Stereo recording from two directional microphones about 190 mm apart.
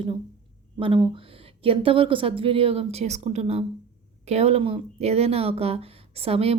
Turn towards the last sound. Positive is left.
turn(degrees=-30)  # may be behind; listen again after turning